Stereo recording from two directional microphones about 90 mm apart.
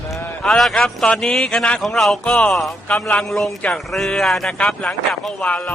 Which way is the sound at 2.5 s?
Centre (ahead or behind).